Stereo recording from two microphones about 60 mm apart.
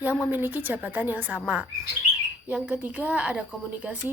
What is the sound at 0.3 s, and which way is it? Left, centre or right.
Speech, right.